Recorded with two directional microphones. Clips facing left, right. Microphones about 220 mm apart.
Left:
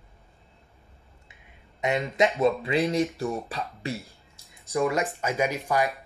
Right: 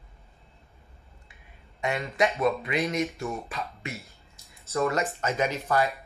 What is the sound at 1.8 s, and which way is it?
Speech, 20° left (ahead or behind).